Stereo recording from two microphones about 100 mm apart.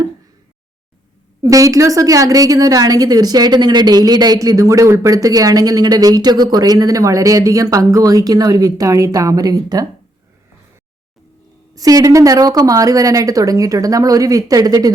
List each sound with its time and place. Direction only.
1.4 s a woman's voice: 35° right (ahead or behind)
11.7 s a woman's voice: 35° right (ahead or behind)